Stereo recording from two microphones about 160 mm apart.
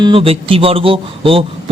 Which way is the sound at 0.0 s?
35° right (ahead or behind).